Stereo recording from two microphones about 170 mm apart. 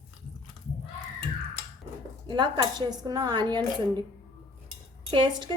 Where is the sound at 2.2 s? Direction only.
25° right (ahead or behind).